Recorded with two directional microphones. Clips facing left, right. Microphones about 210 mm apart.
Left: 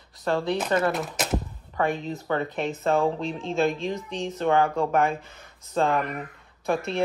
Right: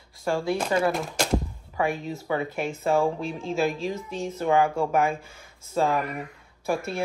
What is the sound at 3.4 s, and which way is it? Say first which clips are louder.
Speech: left 1 dB; centre (ahead or behind).